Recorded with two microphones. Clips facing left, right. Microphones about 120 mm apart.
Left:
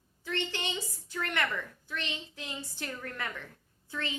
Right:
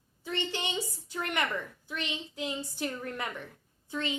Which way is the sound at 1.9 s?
15° right (ahead or behind).